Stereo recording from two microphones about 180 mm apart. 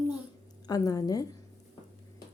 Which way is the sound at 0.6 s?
20° left (ahead or behind).